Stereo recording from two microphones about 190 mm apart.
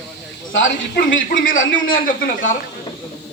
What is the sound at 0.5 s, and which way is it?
Speech, 85° left.